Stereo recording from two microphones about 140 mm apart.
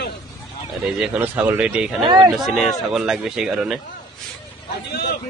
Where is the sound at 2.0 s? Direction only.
35° right (ahead or behind).